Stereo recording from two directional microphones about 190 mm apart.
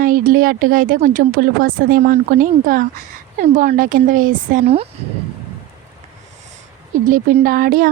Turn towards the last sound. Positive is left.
turn(degrees=-45)  # may be behind; listen again after turning